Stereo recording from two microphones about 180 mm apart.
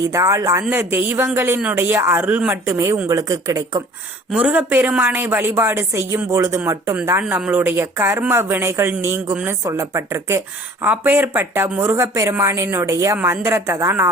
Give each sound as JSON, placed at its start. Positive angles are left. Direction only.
{"t": 0.0, "sound": "speech", "side_deg": -15}
{"t": 4.3, "sound": "speech", "side_deg": -5}